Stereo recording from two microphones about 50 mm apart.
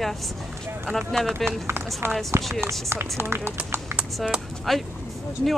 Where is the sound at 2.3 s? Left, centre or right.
Right.